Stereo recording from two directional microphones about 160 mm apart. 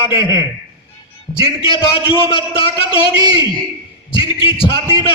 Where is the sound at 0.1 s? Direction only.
30° left (ahead or behind).